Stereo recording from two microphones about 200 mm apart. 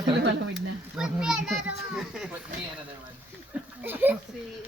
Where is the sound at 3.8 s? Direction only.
10° right (ahead or behind).